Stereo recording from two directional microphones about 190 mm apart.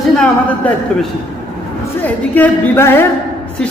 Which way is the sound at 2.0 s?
10° left (ahead or behind).